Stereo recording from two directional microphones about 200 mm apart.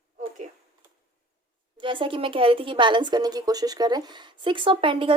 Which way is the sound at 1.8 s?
25° right (ahead or behind).